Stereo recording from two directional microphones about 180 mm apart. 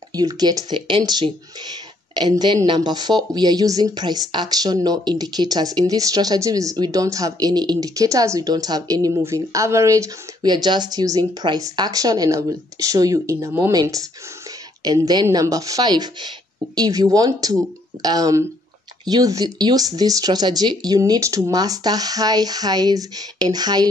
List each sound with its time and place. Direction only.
0.1 s speech: 20° right (ahead or behind)